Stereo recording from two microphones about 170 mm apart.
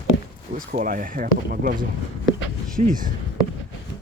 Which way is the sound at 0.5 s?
55° right (ahead or behind).